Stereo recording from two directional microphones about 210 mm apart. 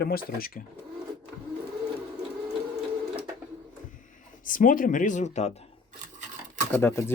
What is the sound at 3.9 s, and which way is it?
Speech, 40° left (ahead or behind).